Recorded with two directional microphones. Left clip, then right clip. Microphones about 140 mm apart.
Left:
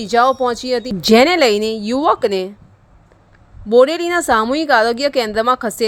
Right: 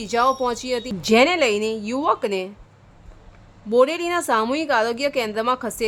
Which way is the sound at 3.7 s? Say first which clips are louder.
Left 6 dB; 40° left (ahead or behind).